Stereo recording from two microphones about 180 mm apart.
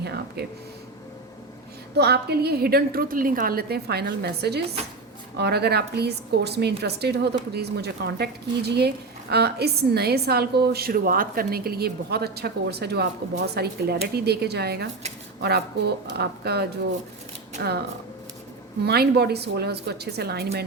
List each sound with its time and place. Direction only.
0.0 s a sound: 65° right (ahead or behind)
2.0 s a woman's voice: 65° right (ahead or behind)
18.9 s a woman's voice: 65° right (ahead or behind)